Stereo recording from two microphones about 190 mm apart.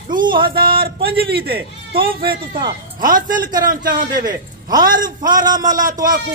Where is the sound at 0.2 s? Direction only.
25° right (ahead or behind).